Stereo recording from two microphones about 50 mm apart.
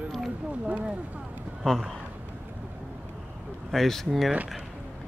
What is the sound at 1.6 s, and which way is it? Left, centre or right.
Speech, centre.